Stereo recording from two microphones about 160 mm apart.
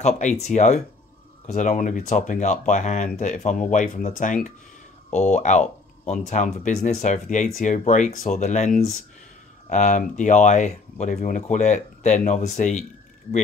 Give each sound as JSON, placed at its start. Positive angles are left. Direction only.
{"t": 0.0, "sound": "speech", "side_deg": 45}